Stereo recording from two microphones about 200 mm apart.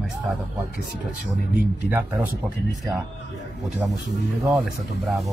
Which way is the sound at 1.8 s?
10° right (ahead or behind).